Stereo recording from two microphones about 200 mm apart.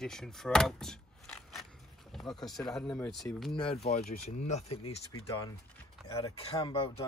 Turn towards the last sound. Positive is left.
turn(degrees=20)  # may be behind; listen again after turning